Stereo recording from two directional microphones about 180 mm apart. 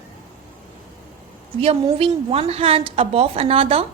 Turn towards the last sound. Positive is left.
turn(degrees=-30)  # may be behind; listen again after turning